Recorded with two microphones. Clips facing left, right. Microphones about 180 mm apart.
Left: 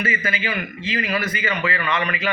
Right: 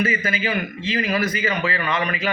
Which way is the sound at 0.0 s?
40° right (ahead or behind).